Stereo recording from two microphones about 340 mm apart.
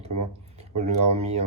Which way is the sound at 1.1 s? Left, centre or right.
Centre.